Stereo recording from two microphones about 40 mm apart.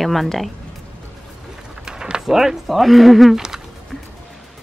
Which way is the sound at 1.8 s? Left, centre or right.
Centre.